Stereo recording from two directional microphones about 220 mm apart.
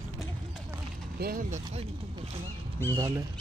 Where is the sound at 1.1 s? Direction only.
40° right (ahead or behind).